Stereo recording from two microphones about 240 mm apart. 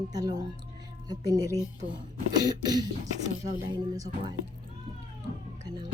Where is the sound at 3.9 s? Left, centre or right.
Centre.